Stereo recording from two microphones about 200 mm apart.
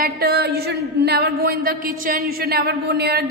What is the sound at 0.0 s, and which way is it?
A woman's voice, 50° right (ahead or behind).